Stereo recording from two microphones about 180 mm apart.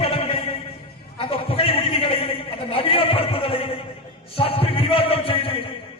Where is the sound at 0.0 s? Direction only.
30° left (ahead or behind).